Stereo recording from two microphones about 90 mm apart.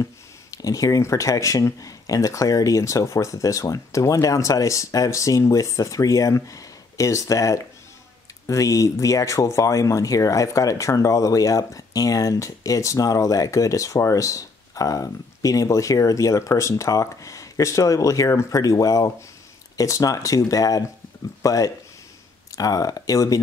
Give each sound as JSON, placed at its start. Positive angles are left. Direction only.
{"t": 0.0, "sound": "speech", "side_deg": 40}